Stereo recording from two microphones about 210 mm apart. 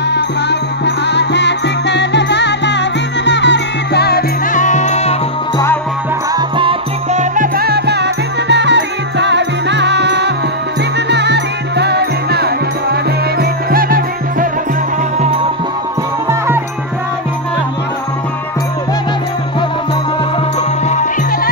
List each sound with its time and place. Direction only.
0.1 s music: 55° left (ahead or behind); by 5.1 s 30° left (ahead or behind)
6.3 s music: 25° right (ahead or behind); by 14.5 s 45° right (ahead or behind)
16.3 s music: 10° right (ahead or behind)
20.9 s music: 35° left (ahead or behind)